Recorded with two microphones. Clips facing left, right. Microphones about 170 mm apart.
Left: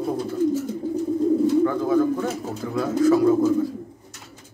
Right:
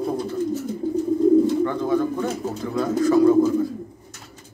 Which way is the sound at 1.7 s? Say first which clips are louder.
Left 2 dB; 5° left (ahead or behind).